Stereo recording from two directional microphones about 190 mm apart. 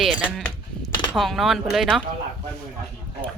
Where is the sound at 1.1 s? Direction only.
Centre (ahead or behind).